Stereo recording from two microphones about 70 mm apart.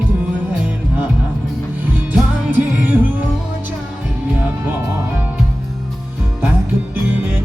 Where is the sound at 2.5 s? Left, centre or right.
Right.